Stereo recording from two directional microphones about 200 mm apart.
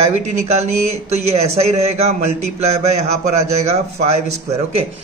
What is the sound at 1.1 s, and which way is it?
Speech, 30° right (ahead or behind).